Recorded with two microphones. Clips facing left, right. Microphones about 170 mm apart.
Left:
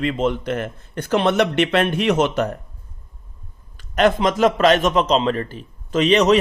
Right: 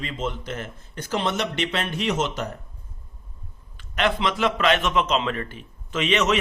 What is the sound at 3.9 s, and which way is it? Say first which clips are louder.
A man's voice: left 7 dB; 45° left (ahead or behind).